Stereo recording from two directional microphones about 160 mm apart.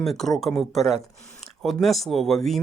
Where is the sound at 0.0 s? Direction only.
Centre (ahead or behind).